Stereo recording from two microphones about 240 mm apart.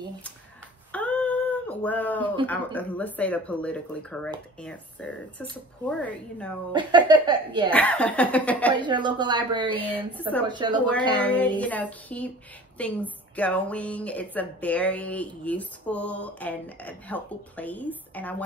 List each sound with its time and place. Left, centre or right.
0.9 s a sound: centre
2.4 s a woman's voice: centre
6.7 s a woman's voice: centre
7.7 s a woman's voice: centre
8.7 s a woman's voice: centre
9.7 s a sound: centre
10.5 s a woman's voice: centre
11.1 s a sound: centre
12.7 s a woman's voice: centre